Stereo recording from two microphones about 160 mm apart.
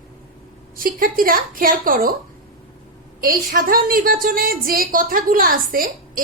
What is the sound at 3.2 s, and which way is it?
Speech, 65° right (ahead or behind).